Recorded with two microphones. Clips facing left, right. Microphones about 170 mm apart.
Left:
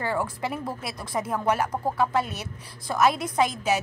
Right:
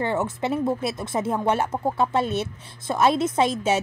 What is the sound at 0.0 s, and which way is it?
A woman's voice, 25° right (ahead or behind).